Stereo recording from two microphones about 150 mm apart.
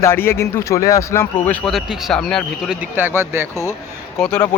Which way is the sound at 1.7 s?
Centre (ahead or behind).